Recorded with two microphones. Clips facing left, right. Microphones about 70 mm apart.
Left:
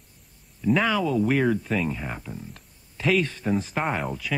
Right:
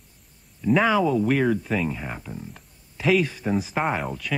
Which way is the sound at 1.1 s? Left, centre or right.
Centre.